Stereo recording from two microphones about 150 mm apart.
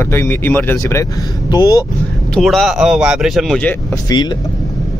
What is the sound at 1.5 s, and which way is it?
Speech, 25° left (ahead or behind).